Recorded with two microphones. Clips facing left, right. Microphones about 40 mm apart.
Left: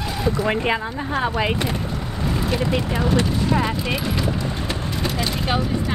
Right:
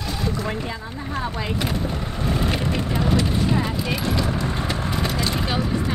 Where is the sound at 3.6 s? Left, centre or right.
Centre.